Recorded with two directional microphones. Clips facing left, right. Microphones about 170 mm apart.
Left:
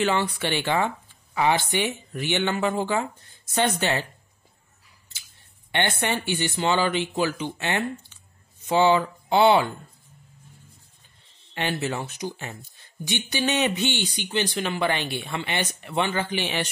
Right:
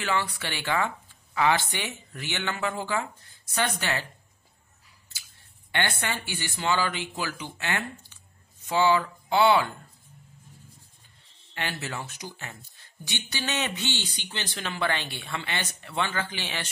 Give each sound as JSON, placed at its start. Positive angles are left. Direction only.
{"t": 0.0, "sound": "speech", "side_deg": 25}
{"t": 5.7, "sound": "speech", "side_deg": 20}
{"t": 11.5, "sound": "speech", "side_deg": 20}